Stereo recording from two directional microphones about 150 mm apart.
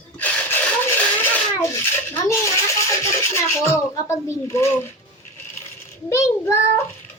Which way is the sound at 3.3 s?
15° left (ahead or behind).